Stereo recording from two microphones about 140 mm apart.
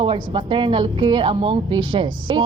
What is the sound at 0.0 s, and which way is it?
A man's voice, 40° right (ahead or behind).